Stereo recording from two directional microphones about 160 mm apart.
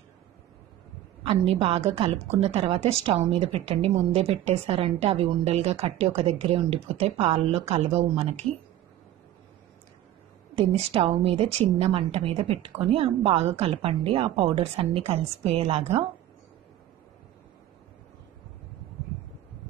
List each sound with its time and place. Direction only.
1.2 s a woman's voice: 35° right (ahead or behind)
10.5 s a woman's voice: 35° right (ahead or behind)